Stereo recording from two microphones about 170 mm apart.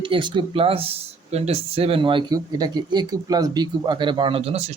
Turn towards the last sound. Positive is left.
turn(degrees=-35)  # may be behind; listen again after turning